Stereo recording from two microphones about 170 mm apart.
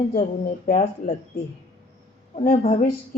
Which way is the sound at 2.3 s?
35° left (ahead or behind).